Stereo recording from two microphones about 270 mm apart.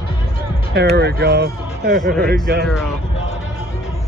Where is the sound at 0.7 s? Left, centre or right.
Right.